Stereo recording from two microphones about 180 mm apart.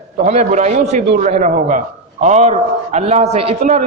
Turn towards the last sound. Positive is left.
turn(degrees=-35)  # may be behind; listen again after turning